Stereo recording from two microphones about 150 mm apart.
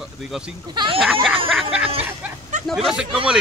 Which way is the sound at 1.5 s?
5° right (ahead or behind).